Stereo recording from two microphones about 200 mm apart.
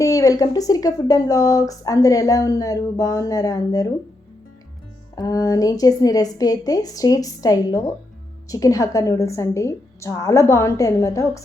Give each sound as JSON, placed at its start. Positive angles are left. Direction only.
{"t": 0.0, "sound": "speech", "side_deg": 15}
{"t": 5.1, "sound": "speech", "side_deg": 20}